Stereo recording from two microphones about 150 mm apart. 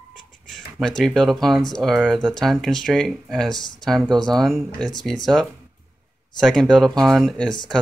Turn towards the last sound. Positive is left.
turn(degrees=5)  # may be behind; listen again after turning